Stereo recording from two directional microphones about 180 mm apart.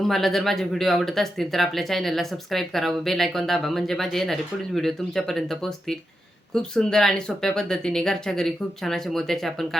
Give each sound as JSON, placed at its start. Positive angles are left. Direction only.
{"t": 0.0, "sound": "speech", "side_deg": 0}